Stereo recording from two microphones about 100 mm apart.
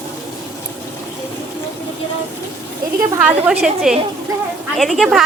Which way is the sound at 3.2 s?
10° right (ahead or behind).